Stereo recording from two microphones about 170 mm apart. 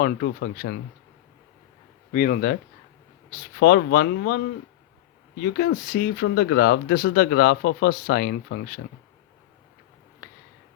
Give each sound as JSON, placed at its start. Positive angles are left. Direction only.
{"t": 0.0, "sound": "speech", "side_deg": 60}
{"t": 2.1, "sound": "speech", "side_deg": 50}
{"t": 3.6, "sound": "speech", "side_deg": 85}
{"t": 5.4, "sound": "speech", "side_deg": 70}